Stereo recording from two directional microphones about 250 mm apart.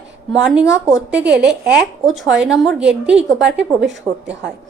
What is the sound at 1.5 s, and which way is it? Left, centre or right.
Speech, right.